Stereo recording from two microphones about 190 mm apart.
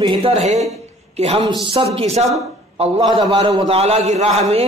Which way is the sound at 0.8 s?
30° right (ahead or behind).